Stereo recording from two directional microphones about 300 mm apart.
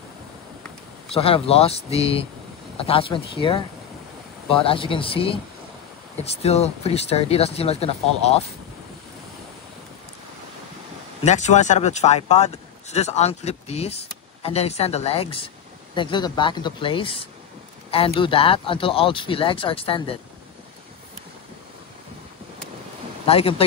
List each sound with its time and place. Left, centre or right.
1.1 s speech: centre
4.6 s speech: centre
11.2 s speech: left
23.2 s speech: centre